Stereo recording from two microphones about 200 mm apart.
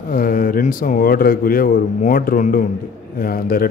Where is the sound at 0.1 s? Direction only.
45° left (ahead or behind).